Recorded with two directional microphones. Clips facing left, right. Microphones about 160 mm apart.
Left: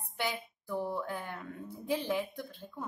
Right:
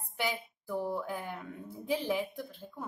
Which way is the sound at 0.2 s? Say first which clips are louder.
Right 1 dB; 10° right (ahead or behind).